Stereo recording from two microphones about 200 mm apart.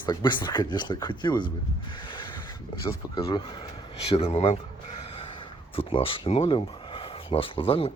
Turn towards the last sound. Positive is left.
turn(degrees=30)  # may be behind; listen again after turning